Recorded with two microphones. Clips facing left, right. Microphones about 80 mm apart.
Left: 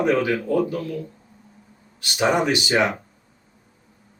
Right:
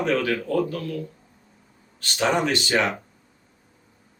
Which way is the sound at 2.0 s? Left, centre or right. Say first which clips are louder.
Left 2 dB; centre.